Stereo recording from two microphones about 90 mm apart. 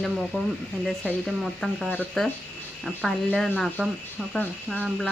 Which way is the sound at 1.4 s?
Centre (ahead or behind).